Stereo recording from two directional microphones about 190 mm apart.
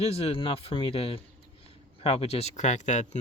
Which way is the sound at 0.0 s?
30° left (ahead or behind).